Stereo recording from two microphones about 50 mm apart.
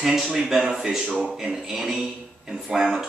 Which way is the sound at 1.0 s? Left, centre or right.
Right.